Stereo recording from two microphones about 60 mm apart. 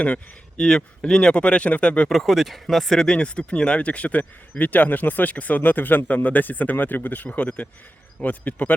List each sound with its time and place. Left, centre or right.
1.0 s speech: centre
2.0 s speech: centre; by 8.7 s left